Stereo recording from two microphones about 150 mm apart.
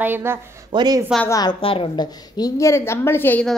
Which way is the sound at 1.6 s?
35° left (ahead or behind).